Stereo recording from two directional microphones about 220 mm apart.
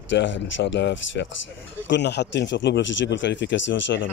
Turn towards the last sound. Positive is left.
turn(degrees=55)  # may be behind; listen again after turning